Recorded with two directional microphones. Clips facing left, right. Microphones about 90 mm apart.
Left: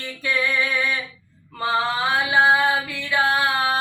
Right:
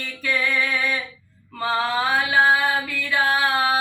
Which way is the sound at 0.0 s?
20° left (ahead or behind).